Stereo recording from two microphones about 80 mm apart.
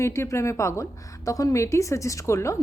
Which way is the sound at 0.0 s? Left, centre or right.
Left.